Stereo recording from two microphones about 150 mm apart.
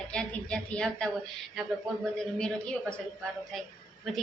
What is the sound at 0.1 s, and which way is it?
A woman's voice, 5° left (ahead or behind).